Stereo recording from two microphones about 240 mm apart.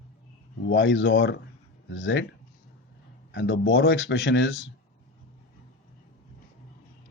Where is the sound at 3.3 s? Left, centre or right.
Left.